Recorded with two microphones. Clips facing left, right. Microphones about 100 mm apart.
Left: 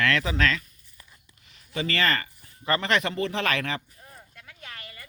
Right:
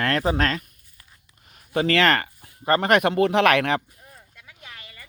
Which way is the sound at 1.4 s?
50° right (ahead or behind).